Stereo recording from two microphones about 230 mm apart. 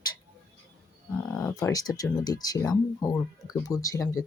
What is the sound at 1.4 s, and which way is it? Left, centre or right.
Speech, centre.